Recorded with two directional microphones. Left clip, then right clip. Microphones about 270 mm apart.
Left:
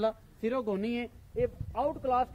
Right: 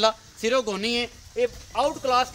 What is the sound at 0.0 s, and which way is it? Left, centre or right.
A man's voice, centre.